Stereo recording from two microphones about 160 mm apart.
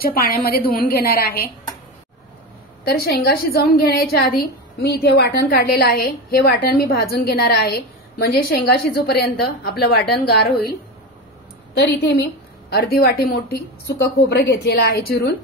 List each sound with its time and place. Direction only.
0.0 s a woman's voice: 70° left (ahead or behind)
2.8 s a woman's voice: 90° left
5.5 s a woman's voice: 70° left (ahead or behind)
11.7 s a woman's voice: 90° left